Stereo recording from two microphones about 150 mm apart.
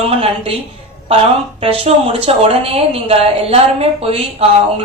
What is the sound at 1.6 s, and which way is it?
A woman's voice, 40° right (ahead or behind).